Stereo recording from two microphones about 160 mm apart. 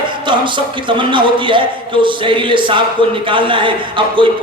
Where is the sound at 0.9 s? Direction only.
30° right (ahead or behind).